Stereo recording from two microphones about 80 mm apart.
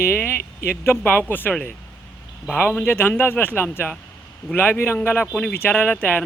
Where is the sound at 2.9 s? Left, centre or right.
Left.